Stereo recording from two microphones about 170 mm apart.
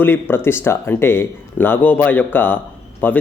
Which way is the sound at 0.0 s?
15° left (ahead or behind).